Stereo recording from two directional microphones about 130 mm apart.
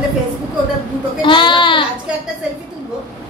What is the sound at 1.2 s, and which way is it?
Speech, 40° left (ahead or behind).